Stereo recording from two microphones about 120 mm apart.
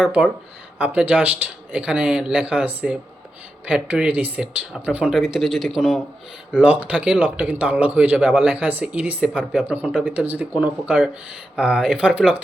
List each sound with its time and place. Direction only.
0.8 s speech: 10° right (ahead or behind)
9.9 s speech: 5° left (ahead or behind)
10.2 s speech: 15° right (ahead or behind)